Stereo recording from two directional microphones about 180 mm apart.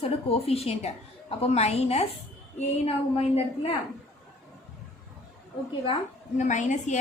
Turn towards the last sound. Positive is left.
turn(degrees=40)  # may be behind; listen again after turning